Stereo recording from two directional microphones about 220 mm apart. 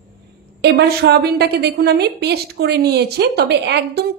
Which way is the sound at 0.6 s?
50° right (ahead or behind).